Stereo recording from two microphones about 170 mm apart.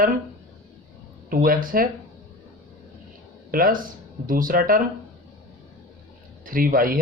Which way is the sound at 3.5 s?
55° right (ahead or behind).